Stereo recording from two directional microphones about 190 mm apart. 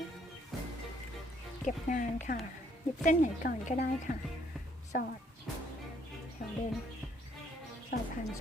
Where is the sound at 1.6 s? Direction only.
40° left (ahead or behind).